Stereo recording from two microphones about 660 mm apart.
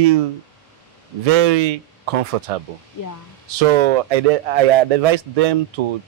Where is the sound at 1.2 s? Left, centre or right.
Right.